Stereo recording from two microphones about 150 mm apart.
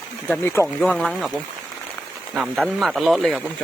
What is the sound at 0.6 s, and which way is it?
Speech, centre (ahead or behind).